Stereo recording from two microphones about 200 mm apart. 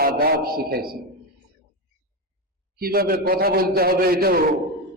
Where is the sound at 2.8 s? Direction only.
50° right (ahead or behind).